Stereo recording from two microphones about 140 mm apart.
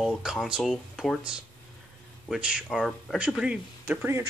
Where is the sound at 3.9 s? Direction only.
15° right (ahead or behind).